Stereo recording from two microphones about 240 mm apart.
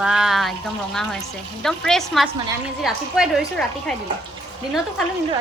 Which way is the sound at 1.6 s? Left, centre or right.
Centre.